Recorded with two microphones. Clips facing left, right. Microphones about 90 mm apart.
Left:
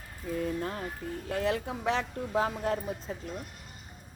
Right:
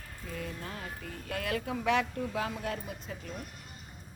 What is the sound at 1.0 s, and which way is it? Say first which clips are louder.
Speech: left 7 dB; 25° left (ahead or behind).